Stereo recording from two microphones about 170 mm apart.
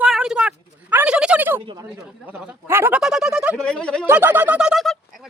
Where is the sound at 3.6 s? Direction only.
5° left (ahead or behind).